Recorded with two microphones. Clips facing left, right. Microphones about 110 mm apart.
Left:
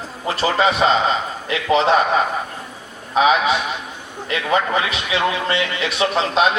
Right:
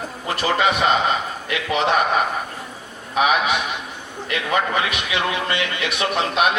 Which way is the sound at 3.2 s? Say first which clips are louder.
Left 3 dB; 25° left (ahead or behind).